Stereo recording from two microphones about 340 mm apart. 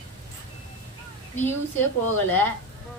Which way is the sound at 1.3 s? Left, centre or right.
Centre.